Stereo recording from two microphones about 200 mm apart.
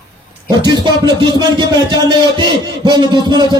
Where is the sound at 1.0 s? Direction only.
20° right (ahead or behind).